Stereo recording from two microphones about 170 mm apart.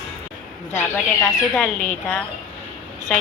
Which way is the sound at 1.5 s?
5° left (ahead or behind).